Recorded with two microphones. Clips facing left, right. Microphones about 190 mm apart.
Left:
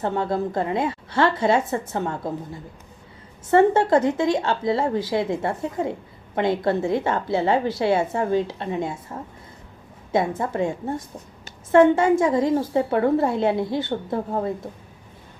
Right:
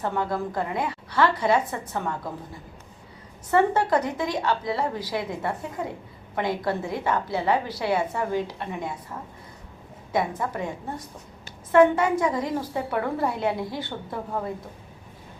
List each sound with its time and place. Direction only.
0.0 s a woman's voice: 25° left (ahead or behind)
3.5 s a woman's voice: 25° left (ahead or behind)